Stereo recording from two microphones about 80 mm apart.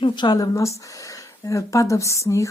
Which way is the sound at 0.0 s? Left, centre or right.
Left.